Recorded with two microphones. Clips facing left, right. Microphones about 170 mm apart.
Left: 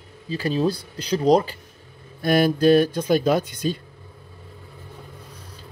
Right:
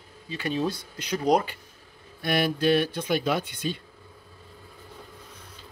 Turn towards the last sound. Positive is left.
turn(degrees=40)  # may be behind; listen again after turning